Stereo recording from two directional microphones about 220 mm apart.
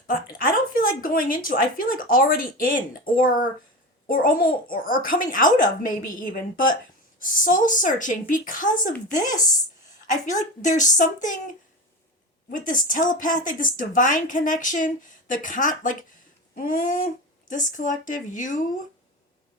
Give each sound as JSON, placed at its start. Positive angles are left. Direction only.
{"t": 0.1, "sound": "speech", "side_deg": 40}
{"t": 12.5, "sound": "speech", "side_deg": 40}